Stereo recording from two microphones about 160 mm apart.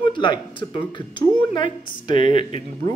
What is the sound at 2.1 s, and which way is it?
Speech, 50° right (ahead or behind).